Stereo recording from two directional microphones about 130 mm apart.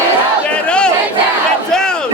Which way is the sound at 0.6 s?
5° left (ahead or behind).